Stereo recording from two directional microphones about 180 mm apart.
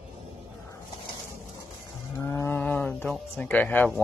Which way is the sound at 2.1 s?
15° left (ahead or behind).